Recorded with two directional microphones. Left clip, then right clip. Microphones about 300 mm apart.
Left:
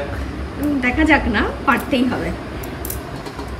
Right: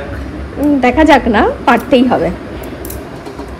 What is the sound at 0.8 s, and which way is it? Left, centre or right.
A woman's voice, centre.